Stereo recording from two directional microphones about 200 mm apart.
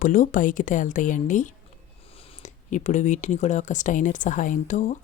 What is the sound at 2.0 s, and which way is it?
Speech, 30° left (ahead or behind).